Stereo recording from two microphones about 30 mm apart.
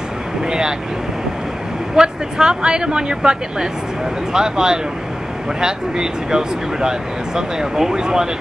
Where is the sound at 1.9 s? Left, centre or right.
Right.